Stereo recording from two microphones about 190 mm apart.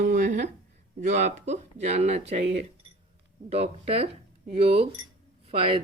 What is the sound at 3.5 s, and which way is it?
Speech, 30° right (ahead or behind).